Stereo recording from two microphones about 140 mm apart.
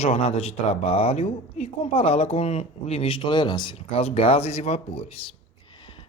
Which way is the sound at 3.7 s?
45° left (ahead or behind).